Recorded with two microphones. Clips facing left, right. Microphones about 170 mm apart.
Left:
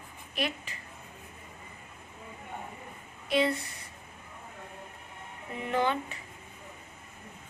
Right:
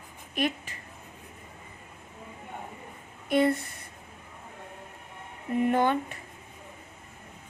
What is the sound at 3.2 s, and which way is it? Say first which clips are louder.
Speech: right 4 dB; 50° right (ahead or behind).